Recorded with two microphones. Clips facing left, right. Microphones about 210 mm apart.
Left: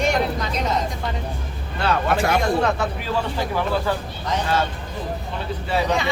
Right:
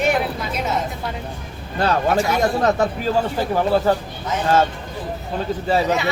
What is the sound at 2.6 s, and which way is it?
Speech, 40° right (ahead or behind).